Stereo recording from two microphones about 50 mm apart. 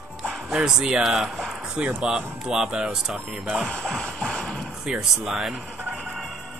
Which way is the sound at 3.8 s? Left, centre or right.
Centre.